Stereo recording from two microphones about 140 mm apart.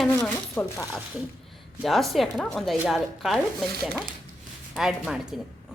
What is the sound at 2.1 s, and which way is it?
Speech, 5° left (ahead or behind).